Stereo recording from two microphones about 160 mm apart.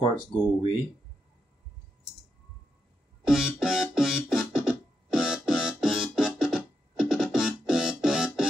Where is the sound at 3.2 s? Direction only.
5° right (ahead or behind).